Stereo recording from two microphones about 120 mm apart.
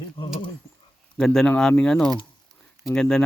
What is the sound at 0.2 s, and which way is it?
Speech, 50° left (ahead or behind).